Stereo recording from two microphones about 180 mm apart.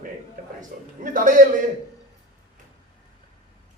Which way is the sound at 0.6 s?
50° right (ahead or behind).